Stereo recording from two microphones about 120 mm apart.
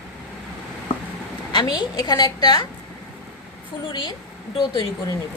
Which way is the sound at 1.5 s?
35° left (ahead or behind).